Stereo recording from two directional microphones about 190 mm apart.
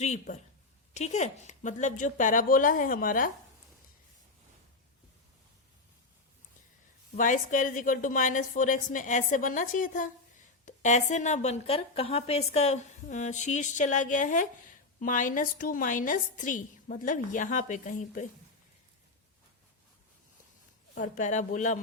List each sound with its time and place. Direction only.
0.0 s a woman's voice: 40° left (ahead or behind)
7.2 s a woman's voice: 45° left (ahead or behind)
20.9 s a woman's voice: 45° left (ahead or behind)